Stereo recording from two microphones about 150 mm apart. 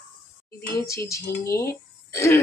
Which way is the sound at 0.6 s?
20° left (ahead or behind).